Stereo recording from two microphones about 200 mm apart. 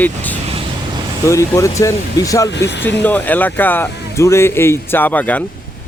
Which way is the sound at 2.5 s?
60° left (ahead or behind).